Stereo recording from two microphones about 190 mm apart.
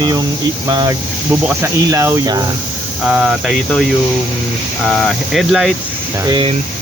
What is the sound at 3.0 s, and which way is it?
Speech, 5° right (ahead or behind).